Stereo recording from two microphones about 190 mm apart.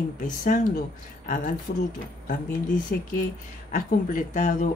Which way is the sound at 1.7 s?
35° left (ahead or behind).